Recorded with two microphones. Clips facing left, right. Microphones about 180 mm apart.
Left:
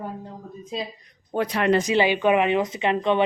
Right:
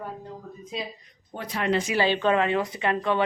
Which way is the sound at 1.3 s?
75° left (ahead or behind).